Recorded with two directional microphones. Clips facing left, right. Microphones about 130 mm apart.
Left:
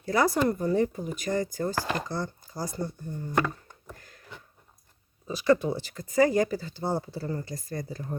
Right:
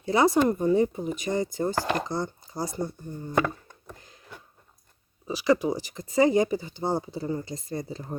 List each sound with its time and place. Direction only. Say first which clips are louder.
0.0 s speech: right 3 dB; 20° right (ahead or behind)
0.4 s chopping: right 3 dB; 15° right (ahead or behind)
3.3 s a sound: right 2 dB; 20° right (ahead or behind)
5.3 s speech: even; 10° right (ahead or behind)
6.1 s chopping: right 2 dB; 20° right (ahead or behind)